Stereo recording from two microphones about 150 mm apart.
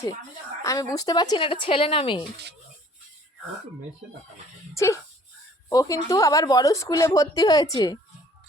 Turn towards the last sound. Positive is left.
turn(degrees=25)  # may be behind; listen again after turning